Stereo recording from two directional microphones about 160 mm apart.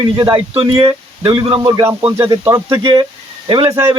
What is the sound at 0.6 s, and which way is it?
Speech, 30° right (ahead or behind).